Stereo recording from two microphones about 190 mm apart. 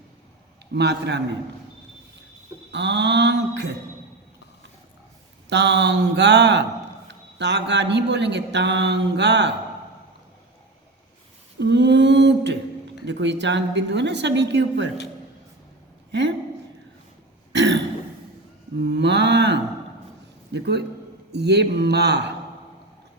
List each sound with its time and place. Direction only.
0.7 s speech: 60° right (ahead or behind)
2.7 s speech: 65° right (ahead or behind)
5.5 s speech: 65° right (ahead or behind)
11.6 s a woman's voice: 70° right (ahead or behind)
17.5 s throat clearing: 65° right (ahead or behind)
18.8 s speech: 65° right (ahead or behind)